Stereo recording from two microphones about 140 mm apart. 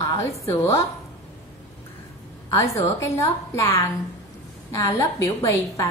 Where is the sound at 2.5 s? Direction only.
20° left (ahead or behind).